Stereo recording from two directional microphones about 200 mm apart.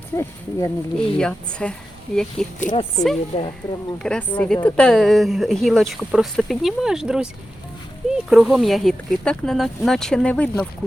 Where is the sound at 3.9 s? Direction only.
5° left (ahead or behind).